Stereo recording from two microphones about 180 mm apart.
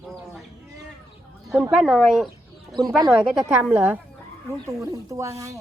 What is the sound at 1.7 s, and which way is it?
Speech, centre (ahead or behind).